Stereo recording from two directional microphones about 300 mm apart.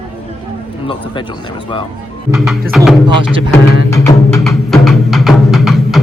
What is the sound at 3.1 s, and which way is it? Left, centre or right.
Speech, centre.